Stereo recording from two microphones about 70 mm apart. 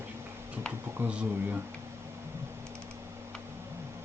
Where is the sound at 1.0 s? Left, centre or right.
Right.